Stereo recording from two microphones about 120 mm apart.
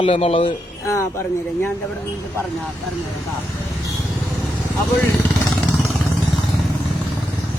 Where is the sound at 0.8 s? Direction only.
25° left (ahead or behind).